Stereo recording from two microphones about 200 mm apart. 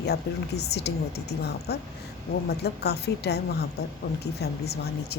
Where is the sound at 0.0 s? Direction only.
55° left (ahead or behind).